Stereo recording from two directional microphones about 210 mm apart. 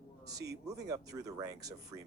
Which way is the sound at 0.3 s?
15° right (ahead or behind).